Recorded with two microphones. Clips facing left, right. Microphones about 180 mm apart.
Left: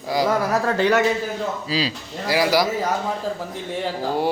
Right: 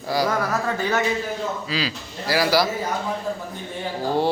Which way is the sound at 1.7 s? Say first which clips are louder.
Left 5 dB; 30° left (ahead or behind).